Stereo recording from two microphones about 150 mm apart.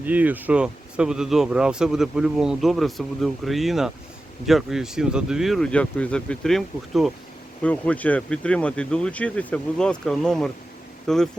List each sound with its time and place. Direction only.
0.0 s speech: 10° right (ahead or behind)